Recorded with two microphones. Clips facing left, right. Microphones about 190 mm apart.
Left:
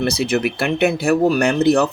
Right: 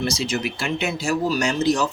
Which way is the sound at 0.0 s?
60° left (ahead or behind).